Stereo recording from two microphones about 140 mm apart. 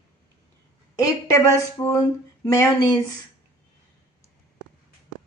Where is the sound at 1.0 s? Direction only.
25° left (ahead or behind).